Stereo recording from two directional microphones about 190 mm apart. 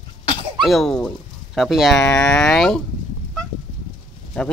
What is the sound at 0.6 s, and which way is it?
Speech, centre (ahead or behind).